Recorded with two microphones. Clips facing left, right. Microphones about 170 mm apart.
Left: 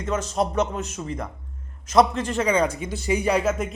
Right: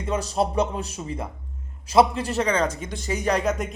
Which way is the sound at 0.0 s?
35° right (ahead or behind).